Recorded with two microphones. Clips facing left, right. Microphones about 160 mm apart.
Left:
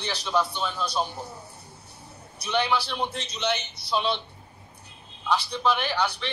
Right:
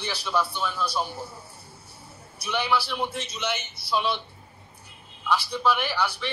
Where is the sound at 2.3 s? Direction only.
10° right (ahead or behind).